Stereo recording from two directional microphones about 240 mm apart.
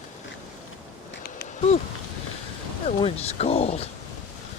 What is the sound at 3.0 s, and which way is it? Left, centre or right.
Speech, left.